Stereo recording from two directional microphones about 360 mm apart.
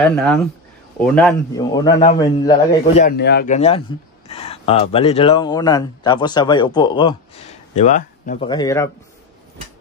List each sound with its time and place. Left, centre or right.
0.0 s a man's voice: centre
3.1 s a man's voice: left; by 8.9 s centre